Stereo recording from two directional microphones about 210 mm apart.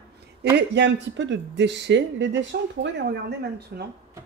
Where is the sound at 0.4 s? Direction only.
55° right (ahead or behind).